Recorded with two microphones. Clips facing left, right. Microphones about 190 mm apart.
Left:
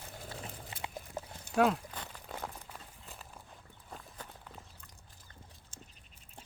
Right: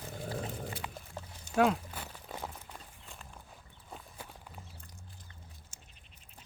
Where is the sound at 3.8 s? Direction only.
5° right (ahead or behind).